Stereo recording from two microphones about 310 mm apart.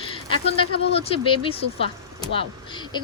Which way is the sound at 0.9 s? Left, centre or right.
Centre.